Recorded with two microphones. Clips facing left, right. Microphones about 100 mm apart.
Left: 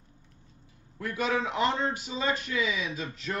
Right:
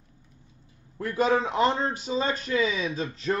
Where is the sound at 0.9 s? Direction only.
35° right (ahead or behind).